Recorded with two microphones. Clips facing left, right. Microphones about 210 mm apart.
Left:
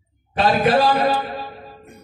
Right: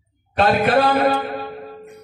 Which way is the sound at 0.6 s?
55° right (ahead or behind).